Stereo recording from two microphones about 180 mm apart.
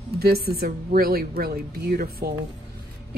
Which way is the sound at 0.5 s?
55° right (ahead or behind).